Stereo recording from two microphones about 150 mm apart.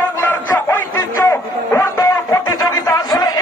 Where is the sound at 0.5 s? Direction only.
15° left (ahead or behind).